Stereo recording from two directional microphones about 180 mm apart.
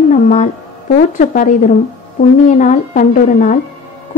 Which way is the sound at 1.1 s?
50° left (ahead or behind).